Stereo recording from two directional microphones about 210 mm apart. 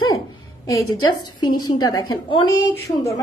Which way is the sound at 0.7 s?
90° left.